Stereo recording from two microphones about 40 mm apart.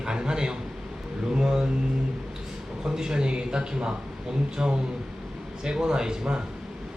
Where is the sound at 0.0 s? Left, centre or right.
Right.